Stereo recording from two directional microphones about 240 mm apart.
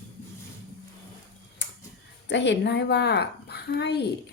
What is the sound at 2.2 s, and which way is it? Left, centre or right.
A woman's voice, left.